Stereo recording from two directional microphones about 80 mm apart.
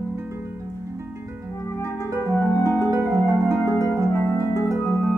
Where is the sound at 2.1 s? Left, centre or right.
Right.